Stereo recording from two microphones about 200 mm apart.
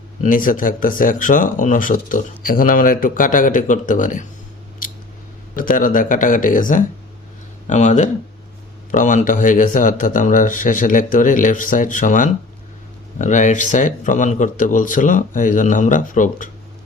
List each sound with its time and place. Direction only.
0.2 s speech: 40° left (ahead or behind)
5.5 s speech: 40° left (ahead or behind)